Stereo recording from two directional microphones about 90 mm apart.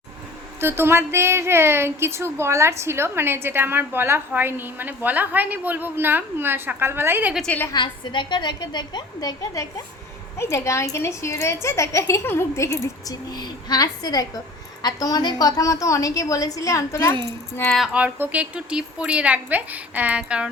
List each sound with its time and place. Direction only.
0.6 s speech: 25° right (ahead or behind)
7.4 s a woman's voice: 20° left (ahead or behind)
7.7 s a woman's voice: 60° left (ahead or behind); by 12.9 s 35° left (ahead or behind)
13.1 s a woman's voice: 50° left (ahead or behind); by 17.2 s 35° left (ahead or behind)
17.7 s speech: centre (ahead or behind)
17.9 s a woman's voice: 15° right (ahead or behind)